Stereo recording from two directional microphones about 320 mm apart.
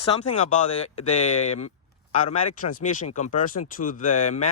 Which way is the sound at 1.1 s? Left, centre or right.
Left.